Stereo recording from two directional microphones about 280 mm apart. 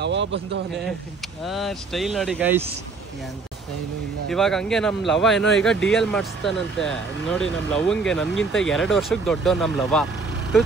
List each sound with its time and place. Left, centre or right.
0.0 s speech: right
1.4 s speech: centre
4.3 s speech: centre